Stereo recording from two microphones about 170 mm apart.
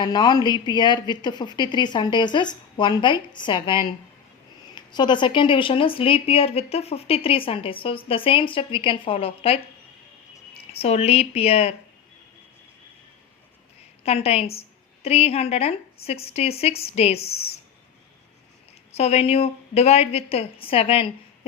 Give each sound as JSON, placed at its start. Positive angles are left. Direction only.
{"t": 0.0, "sound": "a woman's voice", "side_deg": 25}
{"t": 10.7, "sound": "a woman's voice", "side_deg": 35}
{"t": 14.0, "sound": "a woman's voice", "side_deg": 35}
{"t": 18.9, "sound": "a woman's voice", "side_deg": 35}